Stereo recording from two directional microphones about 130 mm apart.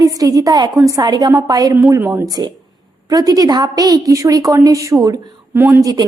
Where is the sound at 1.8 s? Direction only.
20° right (ahead or behind).